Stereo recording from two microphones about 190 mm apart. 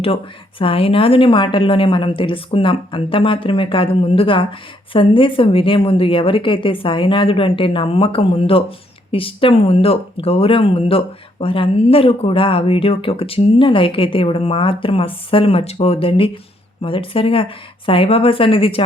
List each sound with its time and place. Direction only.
0.6 s speech: 30° left (ahead or behind)